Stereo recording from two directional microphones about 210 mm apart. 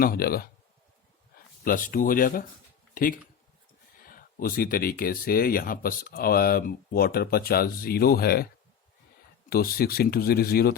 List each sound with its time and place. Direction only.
0.0 s speech: 45° left (ahead or behind)
1.6 s speech: 40° left (ahead or behind)
9.5 s speech: 45° left (ahead or behind)